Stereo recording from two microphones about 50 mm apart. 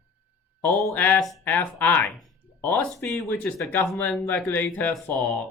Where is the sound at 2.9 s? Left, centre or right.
Centre.